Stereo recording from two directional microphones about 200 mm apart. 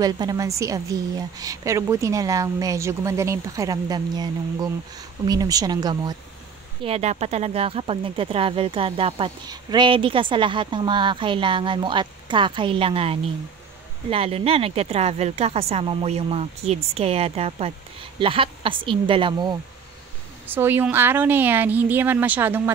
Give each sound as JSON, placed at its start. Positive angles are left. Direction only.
{"t": 0.0, "sound": "a woman's voice", "side_deg": -20}
{"t": 6.8, "sound": "speech", "side_deg": -30}
{"t": 20.4, "sound": "a woman's voice", "side_deg": -10}